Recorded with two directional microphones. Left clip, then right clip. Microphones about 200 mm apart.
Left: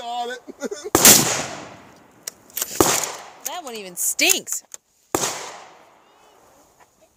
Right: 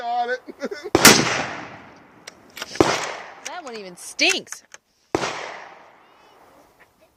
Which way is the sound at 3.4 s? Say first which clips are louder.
Left 3 dB; 10° left (ahead or behind).